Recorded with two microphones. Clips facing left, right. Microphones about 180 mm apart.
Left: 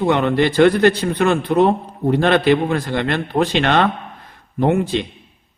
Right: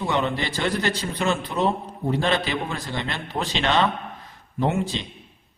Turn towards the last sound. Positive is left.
turn(degrees=60)  # may be behind; listen again after turning